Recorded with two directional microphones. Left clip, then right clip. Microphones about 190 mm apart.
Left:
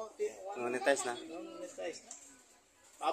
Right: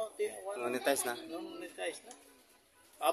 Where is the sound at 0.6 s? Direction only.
Centre (ahead or behind).